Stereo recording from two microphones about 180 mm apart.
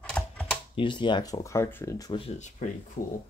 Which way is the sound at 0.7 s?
25° left (ahead or behind).